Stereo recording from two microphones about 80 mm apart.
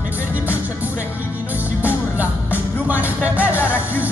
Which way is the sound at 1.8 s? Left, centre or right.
Right.